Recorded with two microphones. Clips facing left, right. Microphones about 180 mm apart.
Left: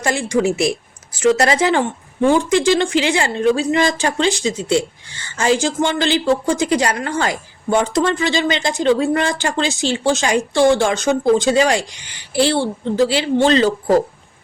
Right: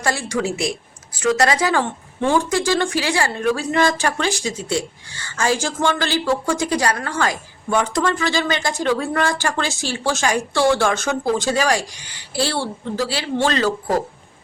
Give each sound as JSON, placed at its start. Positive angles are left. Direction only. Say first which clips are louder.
{"t": 0.0, "sound": "a woman's voice", "louder": "left 5 dB", "side_deg": 20}